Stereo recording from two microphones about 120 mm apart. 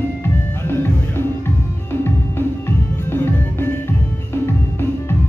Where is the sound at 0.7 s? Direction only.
20° left (ahead or behind).